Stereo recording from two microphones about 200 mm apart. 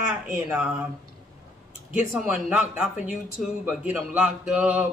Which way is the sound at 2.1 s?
5° right (ahead or behind).